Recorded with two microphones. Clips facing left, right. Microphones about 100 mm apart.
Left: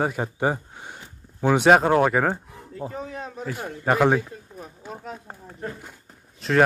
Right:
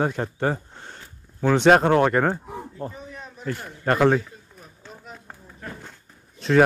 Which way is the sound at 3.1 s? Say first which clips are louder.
Left 7 dB; 40° left (ahead or behind).